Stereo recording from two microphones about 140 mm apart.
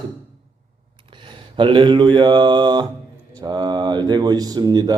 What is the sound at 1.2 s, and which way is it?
A man's voice, 35° right (ahead or behind).